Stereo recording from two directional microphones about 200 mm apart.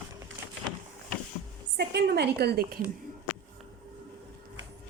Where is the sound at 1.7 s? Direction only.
55° right (ahead or behind).